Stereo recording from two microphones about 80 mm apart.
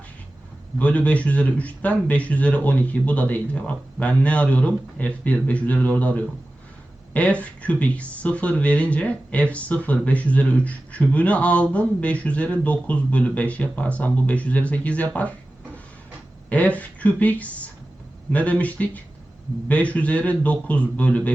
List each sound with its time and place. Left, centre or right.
0.8 s speech: centre
16.5 s speech: centre